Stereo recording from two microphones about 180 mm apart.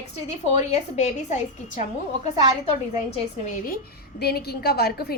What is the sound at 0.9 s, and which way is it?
Speech, 40° left (ahead or behind).